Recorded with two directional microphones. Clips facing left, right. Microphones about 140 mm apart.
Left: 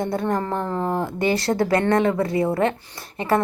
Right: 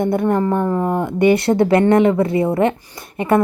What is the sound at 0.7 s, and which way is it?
A woman's voice, 10° right (ahead or behind).